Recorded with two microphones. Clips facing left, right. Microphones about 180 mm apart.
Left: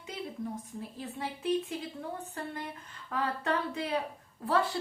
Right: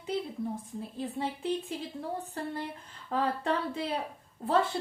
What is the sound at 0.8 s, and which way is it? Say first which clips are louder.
Speech: right 6 dB; 25° right (ahead or behind).